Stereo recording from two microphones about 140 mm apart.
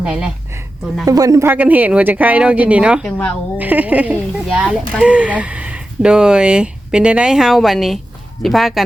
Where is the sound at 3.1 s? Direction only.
15° left (ahead or behind).